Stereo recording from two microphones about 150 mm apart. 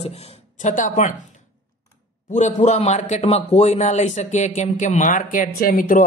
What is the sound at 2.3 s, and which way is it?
Speech, 55° left (ahead or behind).